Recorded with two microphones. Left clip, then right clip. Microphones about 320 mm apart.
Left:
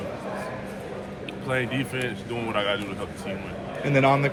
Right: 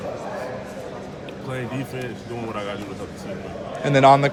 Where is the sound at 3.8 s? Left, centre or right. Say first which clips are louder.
Right 7 dB; centre.